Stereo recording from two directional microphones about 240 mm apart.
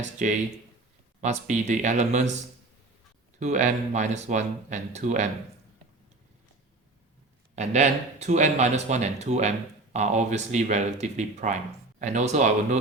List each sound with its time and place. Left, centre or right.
0.0 s speech: right
3.4 s speech: right
7.5 s speech: right